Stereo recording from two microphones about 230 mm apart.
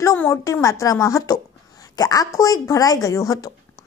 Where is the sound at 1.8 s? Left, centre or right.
Centre.